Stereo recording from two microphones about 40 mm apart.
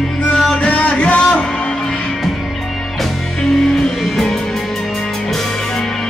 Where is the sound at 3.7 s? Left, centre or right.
Centre.